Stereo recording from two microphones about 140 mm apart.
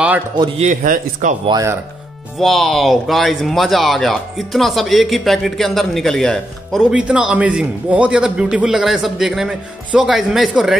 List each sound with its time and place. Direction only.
0.6 s speech: 65° right (ahead or behind)
2.3 s speech: centre (ahead or behind)